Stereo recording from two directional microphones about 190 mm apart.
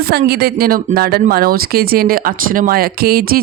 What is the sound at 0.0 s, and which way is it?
Speech, 55° right (ahead or behind).